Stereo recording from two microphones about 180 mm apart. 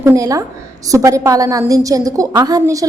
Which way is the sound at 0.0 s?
15° right (ahead or behind).